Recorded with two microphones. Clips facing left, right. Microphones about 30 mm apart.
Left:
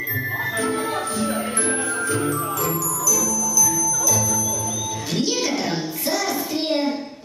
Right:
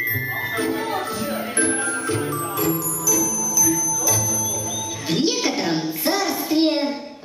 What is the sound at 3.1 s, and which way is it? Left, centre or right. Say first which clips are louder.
Music: right 1 dB; centre.